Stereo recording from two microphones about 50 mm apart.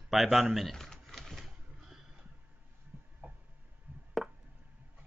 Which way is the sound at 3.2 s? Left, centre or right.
Right.